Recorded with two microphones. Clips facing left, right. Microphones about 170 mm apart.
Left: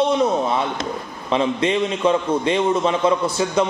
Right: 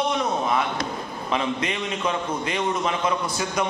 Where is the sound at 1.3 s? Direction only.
30° left (ahead or behind).